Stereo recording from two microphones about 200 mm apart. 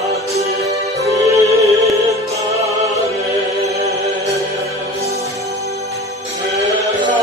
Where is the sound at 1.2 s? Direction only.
15° right (ahead or behind).